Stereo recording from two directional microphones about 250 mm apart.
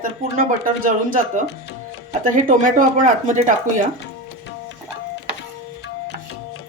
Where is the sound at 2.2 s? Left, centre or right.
Right.